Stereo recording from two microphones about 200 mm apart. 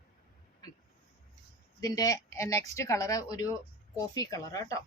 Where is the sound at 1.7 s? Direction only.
20° left (ahead or behind).